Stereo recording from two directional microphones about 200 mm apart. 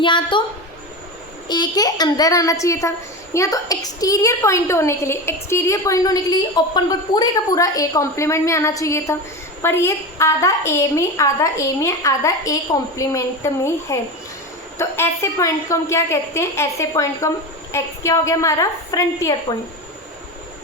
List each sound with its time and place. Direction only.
0.0 s a woman's voice: 25° left (ahead or behind)
1.5 s a woman's voice: 20° left (ahead or behind)